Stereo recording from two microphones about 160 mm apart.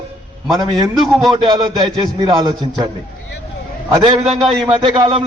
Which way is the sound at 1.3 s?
25° right (ahead or behind).